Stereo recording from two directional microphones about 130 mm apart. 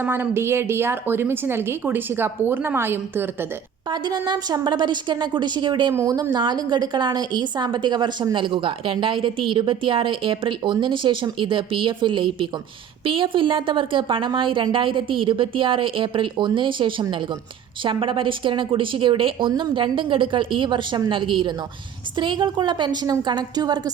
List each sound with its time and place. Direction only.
0.0 s a woman's voice: 15° right (ahead or behind)
3.9 s a woman's voice: 35° right (ahead or behind)
5.9 s a woman's voice: 25° right (ahead or behind)